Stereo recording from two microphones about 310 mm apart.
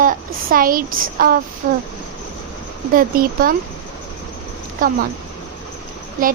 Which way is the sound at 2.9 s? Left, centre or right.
Right.